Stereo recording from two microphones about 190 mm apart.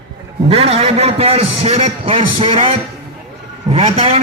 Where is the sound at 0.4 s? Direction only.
30° right (ahead or behind).